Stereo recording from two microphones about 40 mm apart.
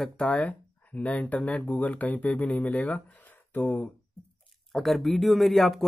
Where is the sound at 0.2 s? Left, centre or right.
Left.